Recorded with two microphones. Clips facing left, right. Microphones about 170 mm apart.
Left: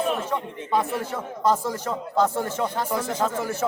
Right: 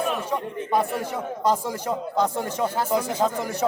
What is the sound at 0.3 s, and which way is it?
Speech, 15° right (ahead or behind).